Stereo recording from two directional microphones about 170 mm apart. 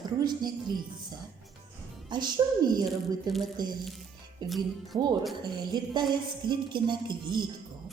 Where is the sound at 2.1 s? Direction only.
25° right (ahead or behind).